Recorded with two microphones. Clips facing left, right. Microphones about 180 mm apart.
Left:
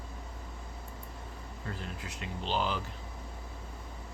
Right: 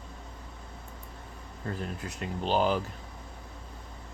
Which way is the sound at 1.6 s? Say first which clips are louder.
Right 6 dB; 45° right (ahead or behind).